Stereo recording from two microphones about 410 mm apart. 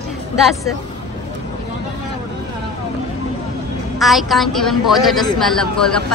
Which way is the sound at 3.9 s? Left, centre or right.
Centre.